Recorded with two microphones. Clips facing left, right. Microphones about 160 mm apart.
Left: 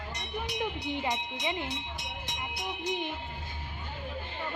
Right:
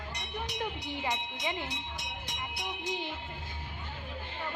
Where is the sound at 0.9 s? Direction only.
15° left (ahead or behind).